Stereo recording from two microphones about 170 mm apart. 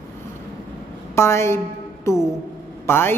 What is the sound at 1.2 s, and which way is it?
A woman's voice, 15° left (ahead or behind).